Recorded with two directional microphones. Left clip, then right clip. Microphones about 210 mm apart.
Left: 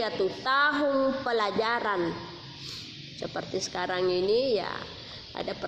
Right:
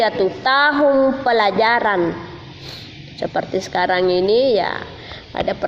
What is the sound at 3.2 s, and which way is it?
A woman's voice, 30° right (ahead or behind).